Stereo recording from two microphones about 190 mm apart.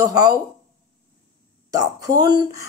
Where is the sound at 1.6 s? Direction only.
20° right (ahead or behind).